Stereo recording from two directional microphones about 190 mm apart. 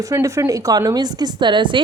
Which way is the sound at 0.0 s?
15° right (ahead or behind).